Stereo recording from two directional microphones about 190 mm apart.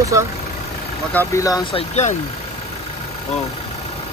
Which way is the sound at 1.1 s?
15° left (ahead or behind).